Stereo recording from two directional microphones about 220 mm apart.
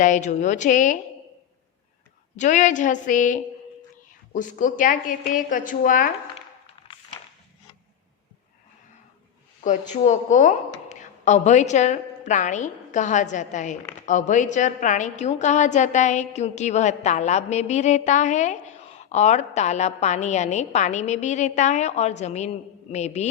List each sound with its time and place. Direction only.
0.0 s a woman's voice: 35° left (ahead or behind)
2.3 s a woman's voice: 35° left (ahead or behind)
9.6 s a woman's voice: 35° left (ahead or behind)